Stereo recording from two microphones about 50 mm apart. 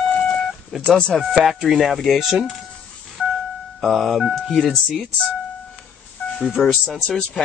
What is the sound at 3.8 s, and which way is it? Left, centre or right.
Speech, centre.